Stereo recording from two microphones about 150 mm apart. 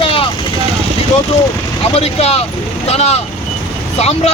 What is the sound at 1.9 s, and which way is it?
Speech, 45° left (ahead or behind).